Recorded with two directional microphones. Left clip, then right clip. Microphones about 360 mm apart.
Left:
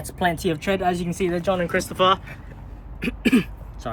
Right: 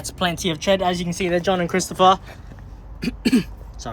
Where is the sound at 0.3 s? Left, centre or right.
Centre.